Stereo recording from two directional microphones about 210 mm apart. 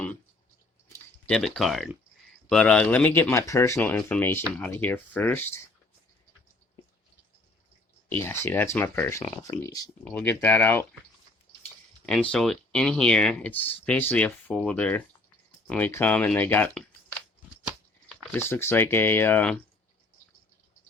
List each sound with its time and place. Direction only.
0.9 s speech: 5° left (ahead or behind)
8.2 s speech: 10° left (ahead or behind)
12.3 s speech: 5° left (ahead or behind)
18.3 s speech: 10° left (ahead or behind)